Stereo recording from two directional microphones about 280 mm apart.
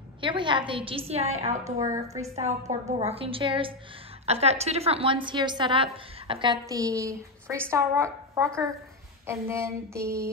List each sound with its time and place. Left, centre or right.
0.2 s a woman's voice: centre
1.6 s a woman's voice: centre
2.3 s a woman's voice: right